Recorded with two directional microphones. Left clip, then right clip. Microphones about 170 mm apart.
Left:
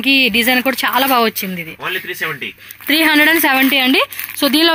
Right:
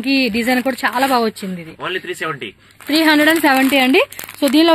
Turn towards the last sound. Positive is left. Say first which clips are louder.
# even
turn(degrees=-5)  # may be behind; listen again after turning